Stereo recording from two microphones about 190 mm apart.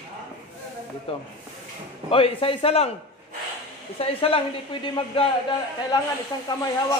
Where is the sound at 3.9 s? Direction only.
30° left (ahead or behind).